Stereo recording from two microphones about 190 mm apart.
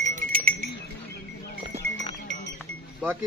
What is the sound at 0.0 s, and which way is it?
Livestock, 45° right (ahead or behind).